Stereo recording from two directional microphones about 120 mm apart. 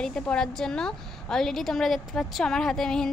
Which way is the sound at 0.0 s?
5° left (ahead or behind).